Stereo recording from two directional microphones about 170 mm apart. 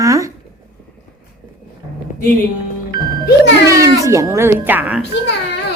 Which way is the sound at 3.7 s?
20° right (ahead or behind).